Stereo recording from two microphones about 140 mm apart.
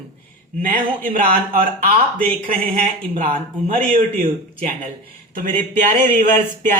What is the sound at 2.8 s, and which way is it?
Speech, 70° right (ahead or behind).